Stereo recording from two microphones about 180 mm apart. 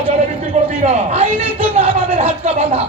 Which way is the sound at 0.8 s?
35° right (ahead or behind).